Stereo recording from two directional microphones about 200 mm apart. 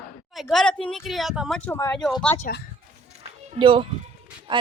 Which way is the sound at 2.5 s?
45° left (ahead or behind).